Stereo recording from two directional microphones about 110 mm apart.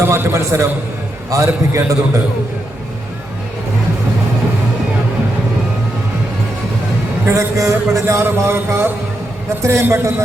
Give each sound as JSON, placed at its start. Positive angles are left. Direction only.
{"t": 0.0, "sound": "a man's voice", "side_deg": -25}
{"t": 7.3, "sound": "a man's voice", "side_deg": -30}